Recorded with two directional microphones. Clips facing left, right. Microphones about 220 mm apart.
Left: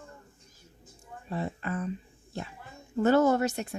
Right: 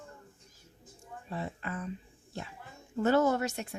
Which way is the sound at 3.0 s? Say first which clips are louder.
Left 4 dB; 50° left (ahead or behind).